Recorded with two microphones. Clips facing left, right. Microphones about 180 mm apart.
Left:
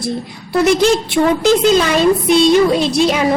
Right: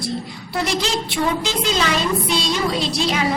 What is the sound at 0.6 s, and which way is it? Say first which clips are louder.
A woman's voice: left 11 dB; 55° left (ahead or behind).